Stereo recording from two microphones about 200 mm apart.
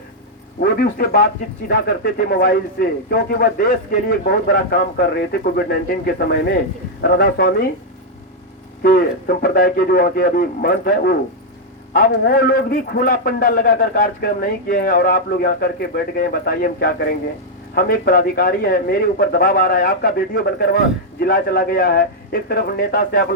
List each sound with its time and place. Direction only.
0.6 s a man's voice: 50° left (ahead or behind)
8.8 s a man's voice: 50° left (ahead or behind)